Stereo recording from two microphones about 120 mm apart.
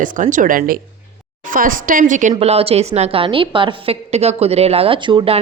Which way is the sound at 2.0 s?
90° right.